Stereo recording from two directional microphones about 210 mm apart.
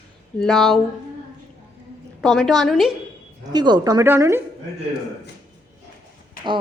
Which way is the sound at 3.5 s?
20° right (ahead or behind).